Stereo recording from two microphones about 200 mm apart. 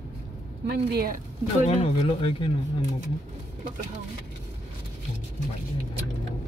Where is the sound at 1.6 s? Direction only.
30° left (ahead or behind).